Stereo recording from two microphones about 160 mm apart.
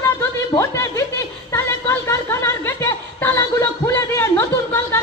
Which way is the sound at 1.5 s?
15° left (ahead or behind).